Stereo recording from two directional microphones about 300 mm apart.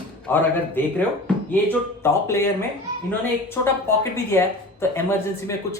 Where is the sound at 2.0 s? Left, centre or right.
Centre.